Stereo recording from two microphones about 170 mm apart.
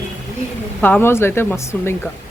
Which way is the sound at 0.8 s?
10° left (ahead or behind).